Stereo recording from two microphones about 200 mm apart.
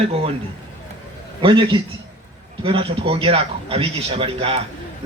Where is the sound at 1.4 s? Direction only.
25° right (ahead or behind).